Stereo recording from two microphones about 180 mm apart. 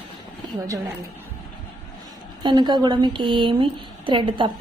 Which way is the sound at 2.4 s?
25° right (ahead or behind).